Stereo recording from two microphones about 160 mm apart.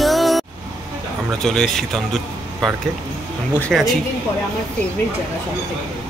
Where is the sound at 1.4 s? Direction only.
5° left (ahead or behind).